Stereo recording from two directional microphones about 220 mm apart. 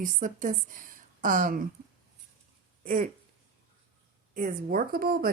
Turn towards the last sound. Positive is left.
turn(degrees=-40)  # may be behind; listen again after turning